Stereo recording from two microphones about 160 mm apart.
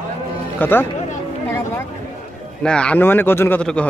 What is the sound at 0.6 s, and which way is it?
Speech, 10° left (ahead or behind).